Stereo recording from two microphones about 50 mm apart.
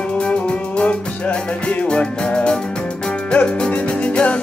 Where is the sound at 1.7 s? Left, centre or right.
Left.